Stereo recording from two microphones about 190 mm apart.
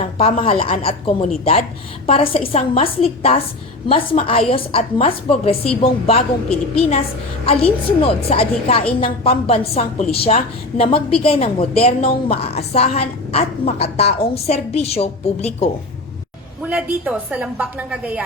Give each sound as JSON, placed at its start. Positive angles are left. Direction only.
{"t": 0.0, "sound": "a woman's voice", "side_deg": 30}
{"t": 7.4, "sound": "a woman's voice", "side_deg": 30}
{"t": 16.6, "sound": "a woman's voice", "side_deg": -5}